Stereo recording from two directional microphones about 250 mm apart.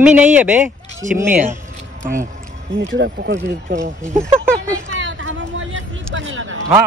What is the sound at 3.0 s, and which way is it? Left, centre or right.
Speech, right.